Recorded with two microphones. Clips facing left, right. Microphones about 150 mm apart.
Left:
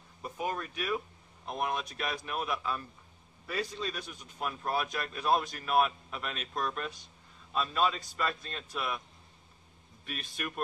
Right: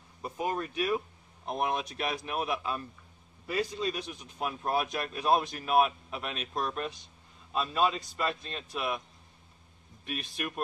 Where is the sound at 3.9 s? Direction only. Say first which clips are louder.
Right 5 dB; 5° right (ahead or behind).